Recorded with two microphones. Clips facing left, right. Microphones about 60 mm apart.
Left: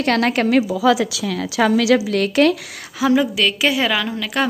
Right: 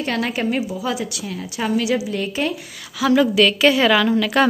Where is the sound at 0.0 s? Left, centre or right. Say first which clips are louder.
Left 5 dB; left.